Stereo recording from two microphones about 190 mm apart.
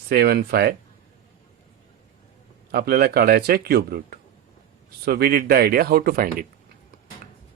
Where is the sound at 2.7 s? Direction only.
55° right (ahead or behind).